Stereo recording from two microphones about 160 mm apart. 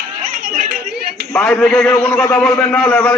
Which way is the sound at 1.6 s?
Centre (ahead or behind).